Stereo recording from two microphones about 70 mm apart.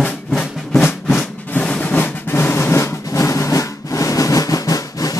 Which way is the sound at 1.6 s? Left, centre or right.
Centre.